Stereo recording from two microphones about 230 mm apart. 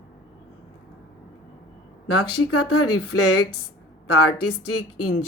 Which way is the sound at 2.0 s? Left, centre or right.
Left.